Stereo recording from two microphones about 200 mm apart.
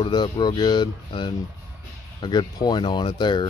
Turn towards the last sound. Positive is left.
turn(degrees=25)  # may be behind; listen again after turning